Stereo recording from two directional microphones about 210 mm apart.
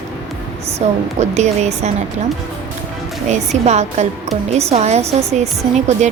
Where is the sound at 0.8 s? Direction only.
30° right (ahead or behind).